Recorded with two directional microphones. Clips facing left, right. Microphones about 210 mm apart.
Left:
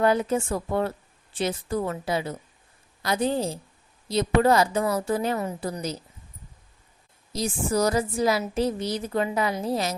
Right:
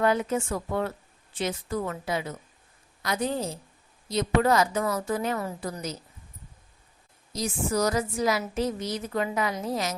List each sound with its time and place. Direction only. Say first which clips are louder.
0.0 s a woman's voice: left 2 dB; 35° left (ahead or behind)
7.3 s a woman's voice: left 2 dB; 30° left (ahead or behind)